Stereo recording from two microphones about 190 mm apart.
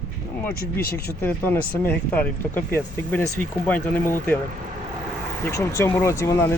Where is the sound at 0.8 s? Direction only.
55° left (ahead or behind).